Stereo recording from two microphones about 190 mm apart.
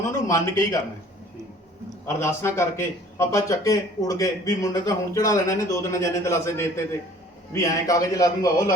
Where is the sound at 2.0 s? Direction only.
15° left (ahead or behind).